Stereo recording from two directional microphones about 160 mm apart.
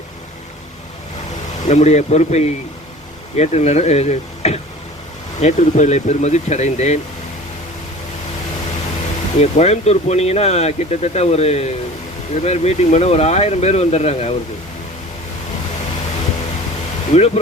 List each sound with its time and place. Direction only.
1.6 s speech: 45° left (ahead or behind)
9.4 s speech: 45° left (ahead or behind)
17.1 s speech: 40° left (ahead or behind)